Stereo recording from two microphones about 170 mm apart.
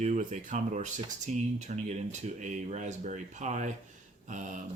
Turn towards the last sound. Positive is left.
turn(degrees=-45)  # may be behind; listen again after turning